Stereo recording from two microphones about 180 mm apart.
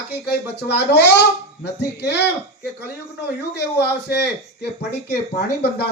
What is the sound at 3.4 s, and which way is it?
Speech, 65° left (ahead or behind).